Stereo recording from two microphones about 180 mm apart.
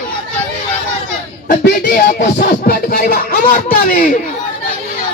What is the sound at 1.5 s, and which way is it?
Music, 55° left (ahead or behind).